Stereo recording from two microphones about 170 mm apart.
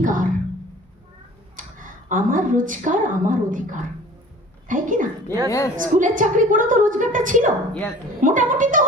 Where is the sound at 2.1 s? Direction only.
50° right (ahead or behind).